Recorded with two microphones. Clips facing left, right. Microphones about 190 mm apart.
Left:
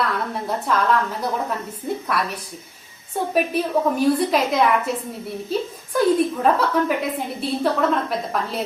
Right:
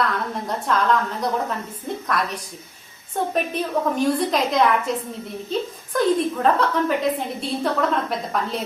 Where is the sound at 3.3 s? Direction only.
10° left (ahead or behind).